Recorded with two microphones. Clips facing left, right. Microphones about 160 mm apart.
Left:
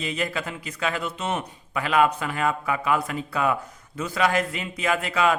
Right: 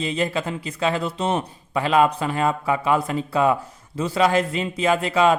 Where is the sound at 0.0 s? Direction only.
30° right (ahead or behind).